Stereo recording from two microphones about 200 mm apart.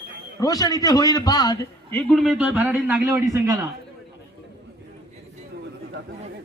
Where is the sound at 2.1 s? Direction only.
Centre (ahead or behind).